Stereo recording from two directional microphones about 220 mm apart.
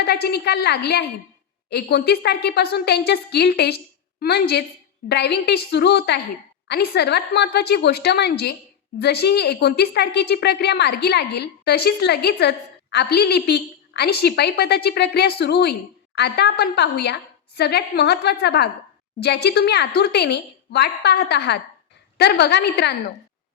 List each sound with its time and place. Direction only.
0.0 s a woman's voice: 45° left (ahead or behind)